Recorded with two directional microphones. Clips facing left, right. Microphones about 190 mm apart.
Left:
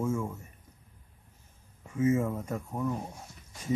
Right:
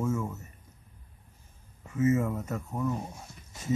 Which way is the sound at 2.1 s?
25° left (ahead or behind).